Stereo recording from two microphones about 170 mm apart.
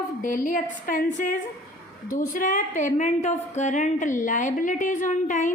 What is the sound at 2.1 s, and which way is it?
A woman's voice, 55° left (ahead or behind).